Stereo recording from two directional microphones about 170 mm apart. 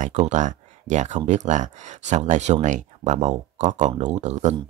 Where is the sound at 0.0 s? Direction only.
45° right (ahead or behind).